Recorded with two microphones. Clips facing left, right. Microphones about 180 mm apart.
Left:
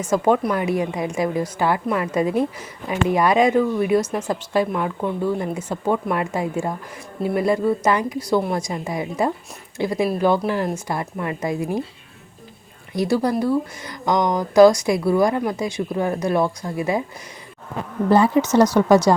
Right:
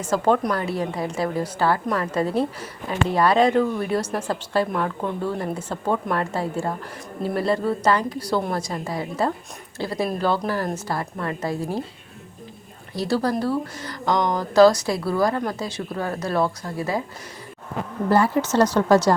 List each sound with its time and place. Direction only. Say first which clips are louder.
0.0 s a woman's voice: left 2 dB; 10° left (ahead or behind)
12.9 s a woman's voice: left 3 dB; 15° left (ahead or behind)
18.1 s a woman's voice: left 4 dB; 20° left (ahead or behind)